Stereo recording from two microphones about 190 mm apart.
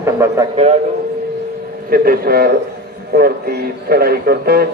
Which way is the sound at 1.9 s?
50° right (ahead or behind).